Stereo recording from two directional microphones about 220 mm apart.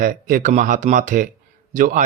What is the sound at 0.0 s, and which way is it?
Speech, 40° right (ahead or behind).